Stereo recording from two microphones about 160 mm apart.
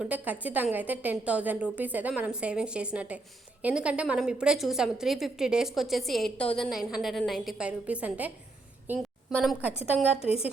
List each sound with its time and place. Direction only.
0.0 s a woman's voice: 10° right (ahead or behind)
8.9 s a sound: 10° right (ahead or behind)
10.2 s a woman's voice: 40° left (ahead or behind)